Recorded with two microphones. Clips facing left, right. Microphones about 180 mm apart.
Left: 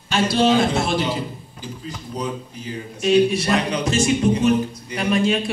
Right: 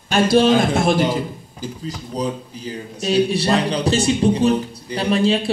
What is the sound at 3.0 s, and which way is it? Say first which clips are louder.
Speech: left 1 dB; 35° right (ahead or behind).